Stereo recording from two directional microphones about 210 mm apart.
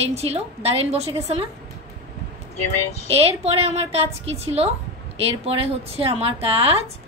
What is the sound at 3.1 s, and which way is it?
A woman's voice, 30° right (ahead or behind).